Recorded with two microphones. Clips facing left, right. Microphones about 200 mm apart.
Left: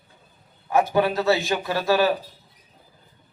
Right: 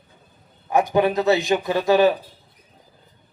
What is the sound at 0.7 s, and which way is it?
A man's voice, 15° right (ahead or behind).